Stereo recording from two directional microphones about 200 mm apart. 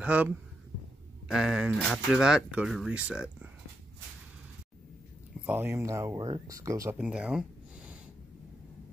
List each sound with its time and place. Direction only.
0.0 s speech: 5° right (ahead or behind)
1.3 s speech: centre (ahead or behind)
5.5 s speech: 10° right (ahead or behind)
7.0 s speech: 5° right (ahead or behind)